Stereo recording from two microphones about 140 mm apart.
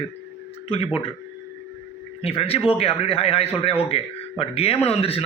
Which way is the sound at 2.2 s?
45° left (ahead or behind).